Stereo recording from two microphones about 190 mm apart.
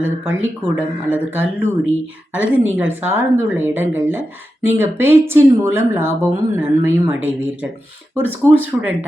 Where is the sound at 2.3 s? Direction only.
90° right.